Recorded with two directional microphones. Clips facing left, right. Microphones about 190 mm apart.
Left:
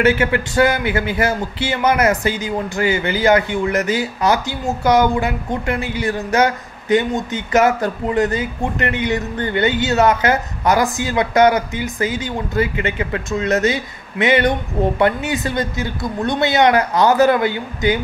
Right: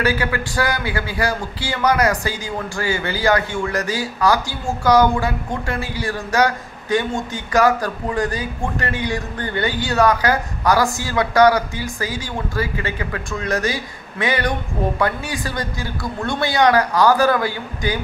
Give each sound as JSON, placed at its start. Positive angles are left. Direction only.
{"t": 0.0, "sound": "a man's voice", "side_deg": 25}